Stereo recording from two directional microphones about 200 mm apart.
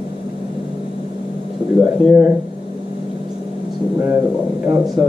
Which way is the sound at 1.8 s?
5° right (ahead or behind).